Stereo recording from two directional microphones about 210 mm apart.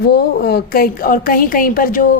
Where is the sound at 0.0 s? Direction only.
50° left (ahead or behind).